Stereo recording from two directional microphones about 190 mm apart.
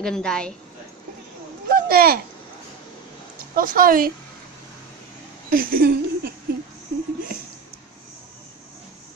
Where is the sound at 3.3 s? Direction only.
45° right (ahead or behind).